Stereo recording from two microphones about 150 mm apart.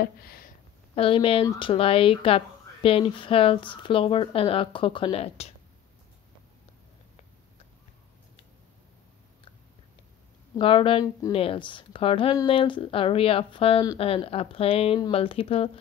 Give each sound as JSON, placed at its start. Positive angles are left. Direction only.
{"t": 0.0, "sound": "speech", "side_deg": 90}
{"t": 0.9, "sound": "speech", "side_deg": 35}
{"t": 10.6, "sound": "speech", "side_deg": 35}